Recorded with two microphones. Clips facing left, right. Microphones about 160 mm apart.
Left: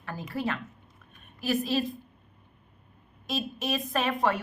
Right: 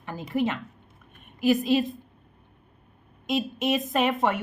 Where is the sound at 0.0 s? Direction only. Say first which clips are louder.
Right 5 dB; 20° right (ahead or behind).